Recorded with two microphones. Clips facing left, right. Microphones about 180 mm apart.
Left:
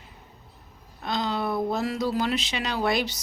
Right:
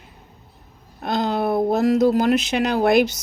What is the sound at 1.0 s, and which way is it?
A woman's voice, 50° right (ahead or behind).